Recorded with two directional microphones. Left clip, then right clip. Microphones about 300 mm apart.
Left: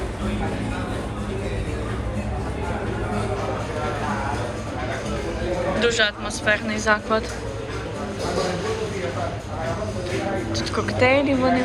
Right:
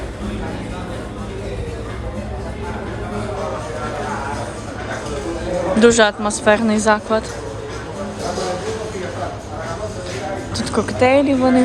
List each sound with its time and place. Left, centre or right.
5.8 s a woman's voice: centre
10.6 s speech: centre